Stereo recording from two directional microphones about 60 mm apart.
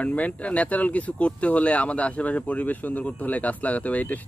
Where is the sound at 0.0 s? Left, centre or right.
Left.